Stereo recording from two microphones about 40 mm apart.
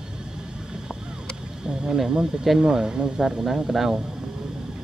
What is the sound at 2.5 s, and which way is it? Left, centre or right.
Speech, centre.